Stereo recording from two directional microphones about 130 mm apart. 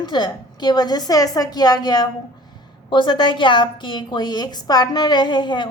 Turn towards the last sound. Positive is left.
turn(degrees=35)  # may be behind; listen again after turning